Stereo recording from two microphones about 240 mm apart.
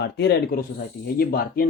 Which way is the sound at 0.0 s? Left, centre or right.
Left.